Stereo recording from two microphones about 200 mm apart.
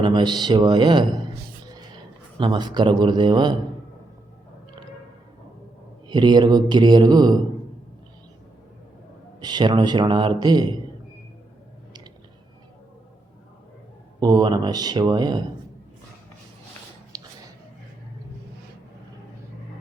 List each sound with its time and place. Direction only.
0.0 s a man's voice: 20° right (ahead or behind)
2.4 s a man's voice: 20° right (ahead or behind)
6.1 s a man's voice: 20° right (ahead or behind)
9.4 s a man's voice: 20° right (ahead or behind)
14.2 s a man's voice: 20° right (ahead or behind)